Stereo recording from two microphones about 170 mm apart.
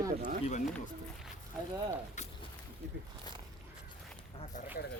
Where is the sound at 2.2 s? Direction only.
45° left (ahead or behind).